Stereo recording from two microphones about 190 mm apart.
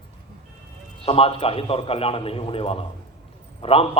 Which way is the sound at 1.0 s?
30° left (ahead or behind).